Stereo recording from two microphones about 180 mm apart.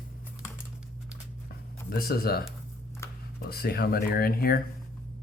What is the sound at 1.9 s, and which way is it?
Speech, 55° left (ahead or behind).